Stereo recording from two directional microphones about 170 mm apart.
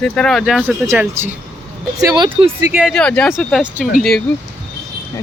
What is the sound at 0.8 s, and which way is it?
Speech, 15° right (ahead or behind).